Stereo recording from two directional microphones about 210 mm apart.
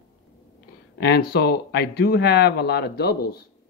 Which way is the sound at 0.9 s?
50° left (ahead or behind).